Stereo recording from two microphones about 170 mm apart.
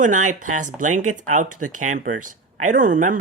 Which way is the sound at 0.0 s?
45° right (ahead or behind).